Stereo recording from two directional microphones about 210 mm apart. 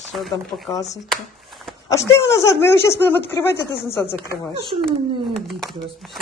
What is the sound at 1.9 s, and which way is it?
Speech, 15° left (ahead or behind).